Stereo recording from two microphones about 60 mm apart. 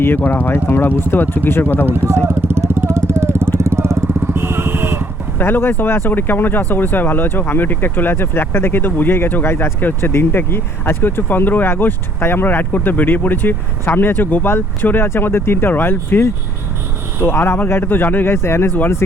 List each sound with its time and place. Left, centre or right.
0.0 s speech: left
2.3 s vehicle: right
4.2 s vehicle: right
5.4 s speech: left
18.4 s speech: left